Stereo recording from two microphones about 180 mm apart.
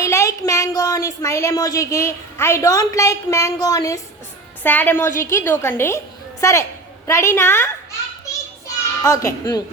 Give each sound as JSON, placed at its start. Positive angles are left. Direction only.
{"t": 0.0, "sound": "a child's voice", "side_deg": 15}